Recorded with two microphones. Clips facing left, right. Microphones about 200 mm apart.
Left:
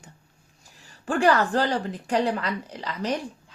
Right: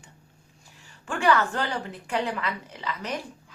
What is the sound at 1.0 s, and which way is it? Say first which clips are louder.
A woman's voice: left 3 dB; 35° left (ahead or behind).